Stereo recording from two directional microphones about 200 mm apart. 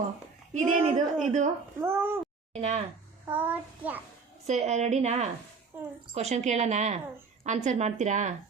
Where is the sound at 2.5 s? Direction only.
35° right (ahead or behind).